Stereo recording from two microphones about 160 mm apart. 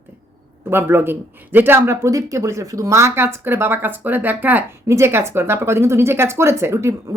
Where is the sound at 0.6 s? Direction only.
15° right (ahead or behind).